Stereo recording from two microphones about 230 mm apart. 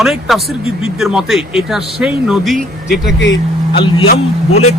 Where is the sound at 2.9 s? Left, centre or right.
Left.